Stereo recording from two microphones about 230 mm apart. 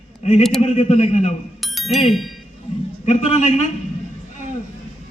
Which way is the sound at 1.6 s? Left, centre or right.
Centre.